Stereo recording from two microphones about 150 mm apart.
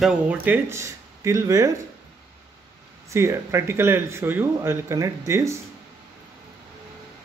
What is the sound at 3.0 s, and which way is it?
Speech, 20° right (ahead or behind).